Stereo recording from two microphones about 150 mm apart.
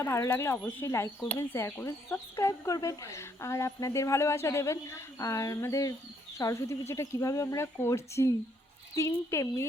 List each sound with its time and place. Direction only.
0.0 s speech: 20° left (ahead or behind)